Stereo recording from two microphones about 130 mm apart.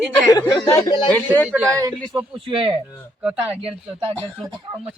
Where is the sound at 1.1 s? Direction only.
15° left (ahead or behind).